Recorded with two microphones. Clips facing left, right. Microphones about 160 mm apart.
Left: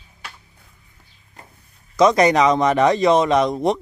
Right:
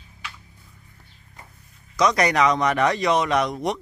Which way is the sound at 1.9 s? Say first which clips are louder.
Left 6 dB; 25° left (ahead or behind).